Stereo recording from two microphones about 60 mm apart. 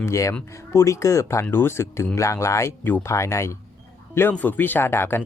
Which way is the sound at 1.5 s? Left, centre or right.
Left.